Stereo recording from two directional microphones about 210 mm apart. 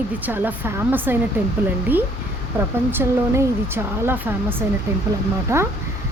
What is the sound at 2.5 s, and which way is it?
Speech, 10° right (ahead or behind).